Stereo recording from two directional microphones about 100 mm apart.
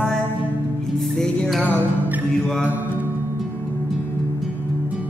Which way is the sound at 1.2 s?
5° left (ahead or behind).